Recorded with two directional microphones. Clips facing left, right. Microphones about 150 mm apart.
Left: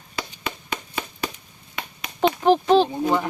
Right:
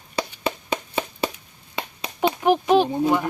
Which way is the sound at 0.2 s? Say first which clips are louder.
Right 5 dB; 30° right (ahead or behind).